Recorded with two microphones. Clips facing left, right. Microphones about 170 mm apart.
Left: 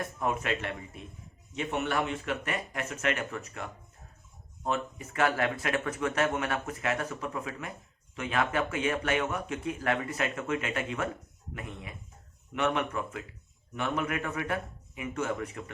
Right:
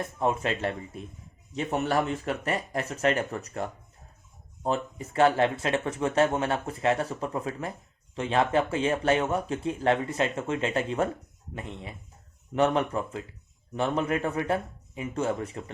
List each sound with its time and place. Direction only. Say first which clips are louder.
0.0 s speech: right 4 dB; 30° right (ahead or behind)